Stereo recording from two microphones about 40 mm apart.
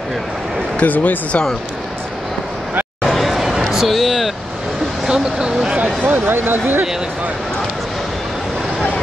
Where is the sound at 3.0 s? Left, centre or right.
Centre.